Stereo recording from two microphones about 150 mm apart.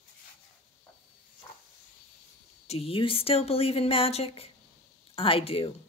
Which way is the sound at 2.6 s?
40° left (ahead or behind).